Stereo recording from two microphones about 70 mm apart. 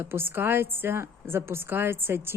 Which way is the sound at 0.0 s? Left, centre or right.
Right.